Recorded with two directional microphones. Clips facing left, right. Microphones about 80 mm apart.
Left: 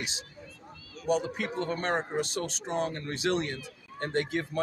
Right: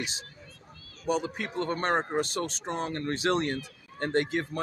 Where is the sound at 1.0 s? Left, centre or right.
Right.